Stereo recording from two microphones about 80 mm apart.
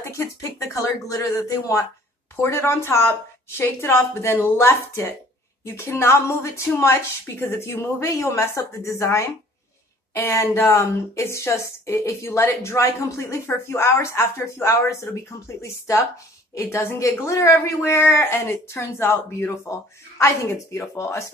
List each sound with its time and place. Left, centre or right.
0.0 s a woman's voice: left